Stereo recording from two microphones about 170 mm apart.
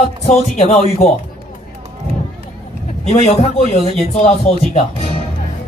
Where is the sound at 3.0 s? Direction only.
40° left (ahead or behind).